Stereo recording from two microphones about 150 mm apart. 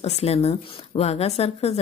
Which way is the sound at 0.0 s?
45° left (ahead or behind).